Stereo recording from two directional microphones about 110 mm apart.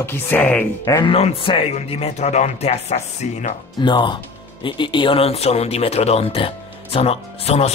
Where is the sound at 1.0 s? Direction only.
55° left (ahead or behind); by 3.5 s 90° left.